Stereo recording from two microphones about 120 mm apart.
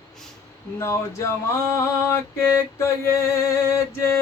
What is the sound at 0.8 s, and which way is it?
Music, 25° left (ahead or behind).